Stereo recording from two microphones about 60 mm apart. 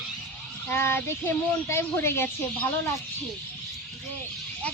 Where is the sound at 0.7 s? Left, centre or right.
Left.